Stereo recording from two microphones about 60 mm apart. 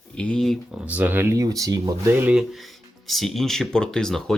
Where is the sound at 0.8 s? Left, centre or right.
Right.